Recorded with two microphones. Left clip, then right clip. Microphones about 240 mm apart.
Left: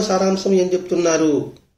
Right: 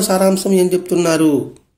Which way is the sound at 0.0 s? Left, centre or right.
Right.